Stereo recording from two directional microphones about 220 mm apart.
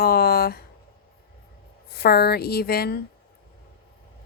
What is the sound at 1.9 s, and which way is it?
Speech, 45° left (ahead or behind).